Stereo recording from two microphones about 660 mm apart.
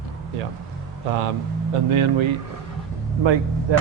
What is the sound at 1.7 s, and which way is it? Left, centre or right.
Speech, right.